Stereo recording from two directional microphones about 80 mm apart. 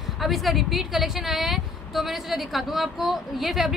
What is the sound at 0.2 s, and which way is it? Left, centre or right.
Speech, centre.